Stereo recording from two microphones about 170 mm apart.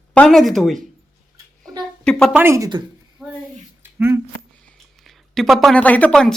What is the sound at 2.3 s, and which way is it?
Speech, 15° right (ahead or behind).